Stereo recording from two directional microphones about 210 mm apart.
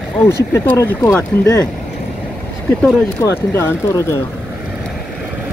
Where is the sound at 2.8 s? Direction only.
15° left (ahead or behind).